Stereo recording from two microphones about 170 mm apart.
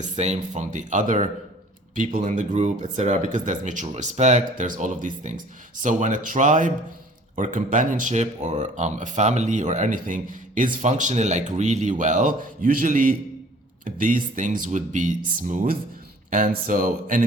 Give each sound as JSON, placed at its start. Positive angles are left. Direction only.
{"t": 0.0, "sound": "speech", "side_deg": -40}